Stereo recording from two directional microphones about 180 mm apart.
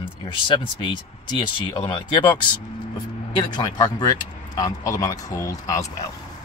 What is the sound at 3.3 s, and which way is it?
Speech, 20° left (ahead or behind).